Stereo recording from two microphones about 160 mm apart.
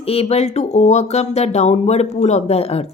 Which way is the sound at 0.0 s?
40° left (ahead or behind).